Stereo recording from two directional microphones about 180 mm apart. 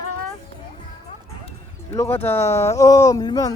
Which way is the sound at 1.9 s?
10° left (ahead or behind).